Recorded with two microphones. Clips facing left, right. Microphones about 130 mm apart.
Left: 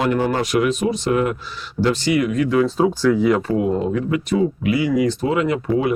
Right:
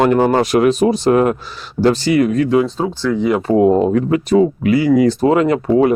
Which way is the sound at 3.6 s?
35° right (ahead or behind).